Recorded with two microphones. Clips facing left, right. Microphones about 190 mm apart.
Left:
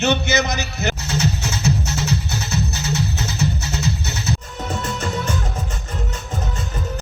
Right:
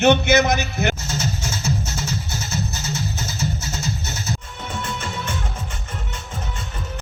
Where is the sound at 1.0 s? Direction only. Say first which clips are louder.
Left 4 dB; 65° left (ahead or behind).